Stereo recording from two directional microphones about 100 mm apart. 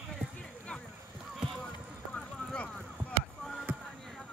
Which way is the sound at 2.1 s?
10° left (ahead or behind).